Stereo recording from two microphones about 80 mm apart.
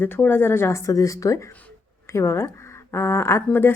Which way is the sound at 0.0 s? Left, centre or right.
Left.